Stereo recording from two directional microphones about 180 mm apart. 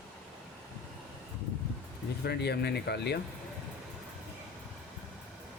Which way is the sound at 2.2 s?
65° left (ahead or behind).